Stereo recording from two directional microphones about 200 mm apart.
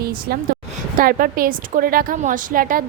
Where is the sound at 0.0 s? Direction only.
50° right (ahead or behind).